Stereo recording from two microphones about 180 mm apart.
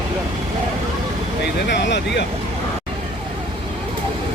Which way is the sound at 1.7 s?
75° left (ahead or behind).